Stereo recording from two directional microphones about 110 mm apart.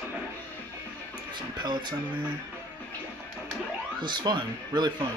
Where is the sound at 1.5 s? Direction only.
45° right (ahead or behind).